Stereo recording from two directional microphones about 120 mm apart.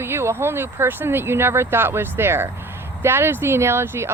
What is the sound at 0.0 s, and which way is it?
Speech, 20° right (ahead or behind).